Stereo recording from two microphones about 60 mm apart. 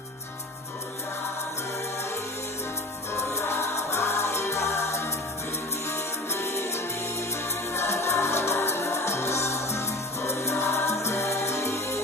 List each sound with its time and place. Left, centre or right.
3.1 s music: left